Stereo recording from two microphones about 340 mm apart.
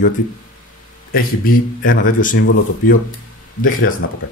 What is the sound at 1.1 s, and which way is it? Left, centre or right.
Speech, left.